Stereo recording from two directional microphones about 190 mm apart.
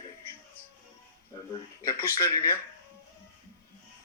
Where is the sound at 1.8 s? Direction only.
15° left (ahead or behind).